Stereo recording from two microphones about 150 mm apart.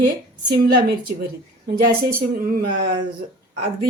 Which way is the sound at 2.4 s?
70° right (ahead or behind).